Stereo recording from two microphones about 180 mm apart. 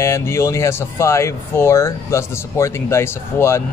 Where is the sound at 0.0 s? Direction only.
15° left (ahead or behind).